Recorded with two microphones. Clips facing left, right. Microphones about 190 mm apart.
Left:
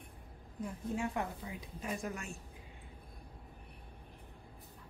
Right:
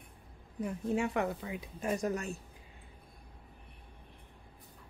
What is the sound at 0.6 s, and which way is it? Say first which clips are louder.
A woman's voice: right 5 dB; 75° right (ahead or behind).